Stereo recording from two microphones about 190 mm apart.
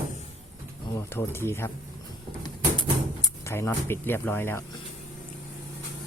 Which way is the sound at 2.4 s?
20° left (ahead or behind).